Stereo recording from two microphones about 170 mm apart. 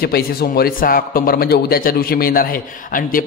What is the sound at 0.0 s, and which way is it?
A man's voice, 65° left (ahead or behind).